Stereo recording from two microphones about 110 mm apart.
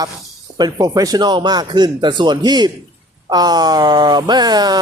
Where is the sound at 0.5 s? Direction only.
35° right (ahead or behind).